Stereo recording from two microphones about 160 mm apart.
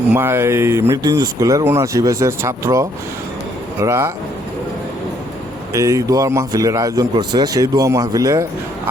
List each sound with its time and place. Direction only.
0.1 s speech: 15° right (ahead or behind)
5.7 s speech: 20° right (ahead or behind)